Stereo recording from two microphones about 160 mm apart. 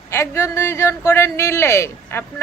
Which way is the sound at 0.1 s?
20° left (ahead or behind).